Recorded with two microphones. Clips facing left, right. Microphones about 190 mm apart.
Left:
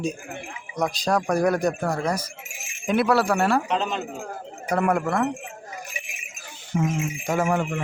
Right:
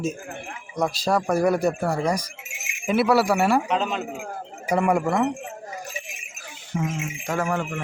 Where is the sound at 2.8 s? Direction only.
5° right (ahead or behind).